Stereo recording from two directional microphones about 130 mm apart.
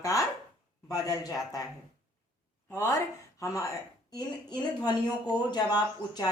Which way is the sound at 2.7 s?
20° left (ahead or behind).